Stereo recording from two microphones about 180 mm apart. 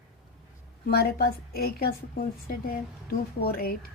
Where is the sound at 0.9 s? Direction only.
60° left (ahead or behind).